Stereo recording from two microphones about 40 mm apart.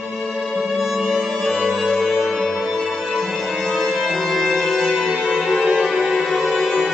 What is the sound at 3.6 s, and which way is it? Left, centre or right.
Music, centre.